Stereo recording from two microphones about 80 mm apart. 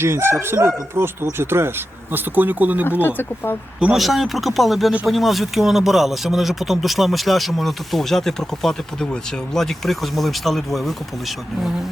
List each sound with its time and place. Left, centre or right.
0.0 s speech: right
3.0 s speech: left
3.9 s speech: centre